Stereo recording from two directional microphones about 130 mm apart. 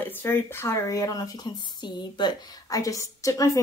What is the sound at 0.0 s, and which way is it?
A woman's voice, 15° left (ahead or behind).